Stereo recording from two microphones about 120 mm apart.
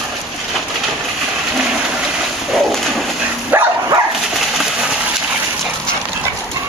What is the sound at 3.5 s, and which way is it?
Dog, 20° right (ahead or behind).